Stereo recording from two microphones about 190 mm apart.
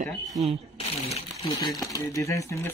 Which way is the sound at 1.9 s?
15° left (ahead or behind).